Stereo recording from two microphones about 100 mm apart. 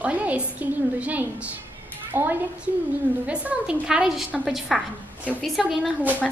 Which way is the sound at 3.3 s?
10° right (ahead or behind).